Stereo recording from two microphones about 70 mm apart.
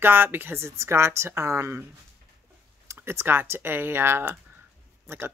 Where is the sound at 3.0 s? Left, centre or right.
Right.